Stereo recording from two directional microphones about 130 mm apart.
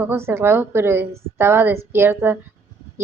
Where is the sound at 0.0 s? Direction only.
20° right (ahead or behind).